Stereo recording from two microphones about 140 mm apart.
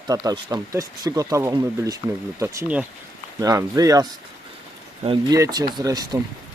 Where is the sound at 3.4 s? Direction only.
25° right (ahead or behind).